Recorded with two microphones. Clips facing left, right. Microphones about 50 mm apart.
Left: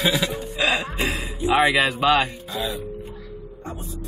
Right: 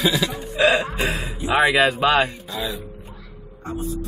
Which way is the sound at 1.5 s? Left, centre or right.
Centre.